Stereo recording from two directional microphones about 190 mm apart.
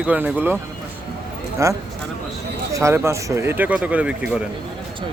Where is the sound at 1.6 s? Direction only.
15° right (ahead or behind).